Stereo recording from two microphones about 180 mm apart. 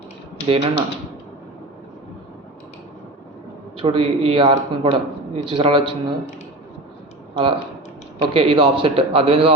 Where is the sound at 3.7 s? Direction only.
30° right (ahead or behind).